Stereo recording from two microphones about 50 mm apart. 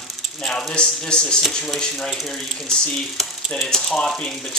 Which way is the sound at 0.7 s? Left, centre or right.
Centre.